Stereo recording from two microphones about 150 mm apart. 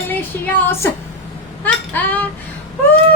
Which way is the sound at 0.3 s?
15° left (ahead or behind).